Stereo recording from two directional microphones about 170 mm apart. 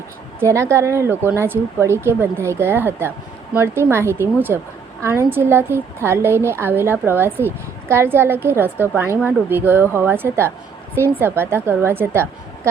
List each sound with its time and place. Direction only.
0.3 s a woman's voice: 15° right (ahead or behind)